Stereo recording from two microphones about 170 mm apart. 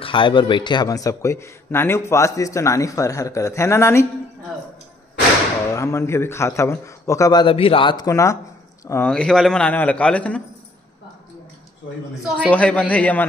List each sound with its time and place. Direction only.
0.0 s a man's voice: 30° left (ahead or behind)
5.7 s a man's voice: 20° left (ahead or behind)
9.1 s a man's voice: 5° left (ahead or behind)
12.4 s a man's voice: 10° left (ahead or behind)